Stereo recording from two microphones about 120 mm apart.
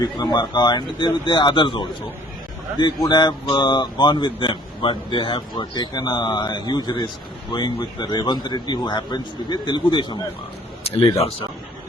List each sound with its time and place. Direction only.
0.0 s speech: 35° left (ahead or behind)